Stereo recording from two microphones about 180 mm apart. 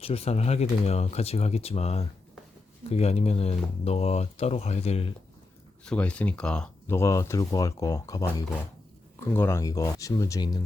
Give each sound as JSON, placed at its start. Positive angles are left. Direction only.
{"t": 0.0, "sound": "speech", "side_deg": 35}
{"t": 5.8, "sound": "speech", "side_deg": 5}
{"t": 9.2, "sound": "speech", "side_deg": 15}